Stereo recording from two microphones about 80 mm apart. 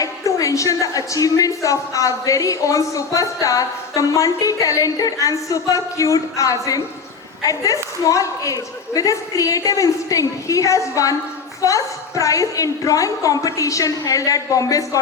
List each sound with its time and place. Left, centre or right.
0.0 s a woman's voice: left